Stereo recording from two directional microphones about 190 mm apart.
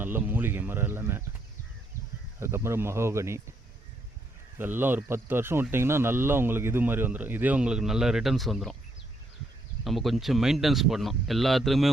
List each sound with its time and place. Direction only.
0.0 s speech: 10° right (ahead or behind)
2.4 s speech: 15° right (ahead or behind)
4.5 s speech: 10° right (ahead or behind)
9.8 s speech: centre (ahead or behind)